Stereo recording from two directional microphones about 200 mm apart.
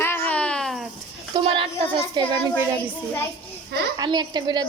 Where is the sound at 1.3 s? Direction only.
20° right (ahead or behind).